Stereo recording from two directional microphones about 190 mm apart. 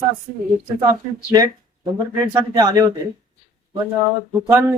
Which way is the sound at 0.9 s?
20° right (ahead or behind).